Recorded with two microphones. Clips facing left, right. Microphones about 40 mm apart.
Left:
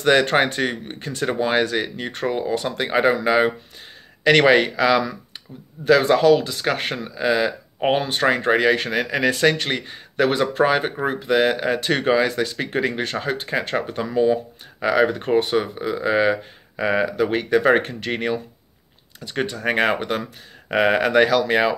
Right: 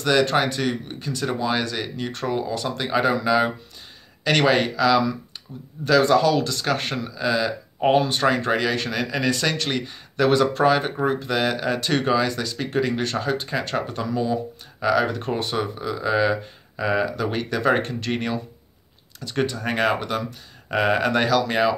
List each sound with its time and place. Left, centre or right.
0.0 s speech: left
17.7 s speech: centre